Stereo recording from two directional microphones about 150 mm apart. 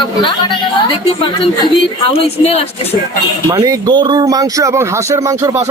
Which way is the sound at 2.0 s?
40° left (ahead or behind).